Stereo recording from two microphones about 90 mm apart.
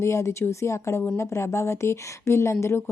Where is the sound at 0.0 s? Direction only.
35° left (ahead or behind).